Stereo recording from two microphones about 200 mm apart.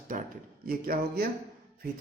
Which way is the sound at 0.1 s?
40° right (ahead or behind).